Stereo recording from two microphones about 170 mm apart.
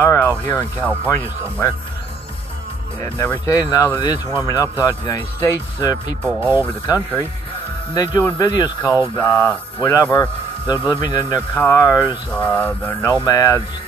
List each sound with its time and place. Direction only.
0.0 s speech: 15° left (ahead or behind)
3.0 s speech: 15° left (ahead or behind)
6.2 s speech: 10° right (ahead or behind)
7.9 s speech: 20° left (ahead or behind)
8.8 s speech: 10° right (ahead or behind)
9.2 s speech: 10° left (ahead or behind)